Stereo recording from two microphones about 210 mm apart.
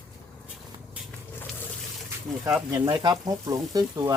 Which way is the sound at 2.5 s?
10° right (ahead or behind).